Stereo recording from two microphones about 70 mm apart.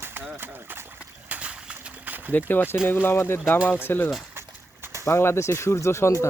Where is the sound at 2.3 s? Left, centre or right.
Left.